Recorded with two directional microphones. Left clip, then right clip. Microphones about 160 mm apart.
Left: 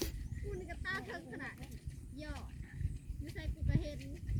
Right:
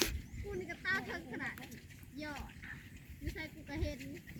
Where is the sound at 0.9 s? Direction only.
45° left (ahead or behind).